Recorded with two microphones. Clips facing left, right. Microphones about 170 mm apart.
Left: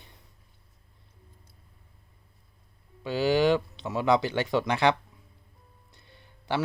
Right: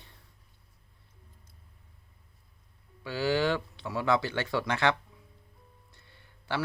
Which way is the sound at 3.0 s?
20° left (ahead or behind).